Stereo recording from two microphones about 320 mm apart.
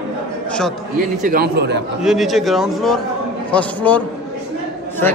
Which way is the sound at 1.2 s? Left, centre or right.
Right.